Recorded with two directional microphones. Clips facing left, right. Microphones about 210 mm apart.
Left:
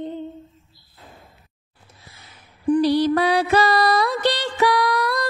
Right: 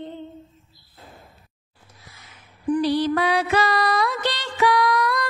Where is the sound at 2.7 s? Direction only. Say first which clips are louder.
Left 3 dB; 40° left (ahead or behind).